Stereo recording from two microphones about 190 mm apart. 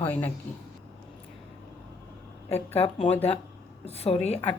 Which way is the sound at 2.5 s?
35° left (ahead or behind).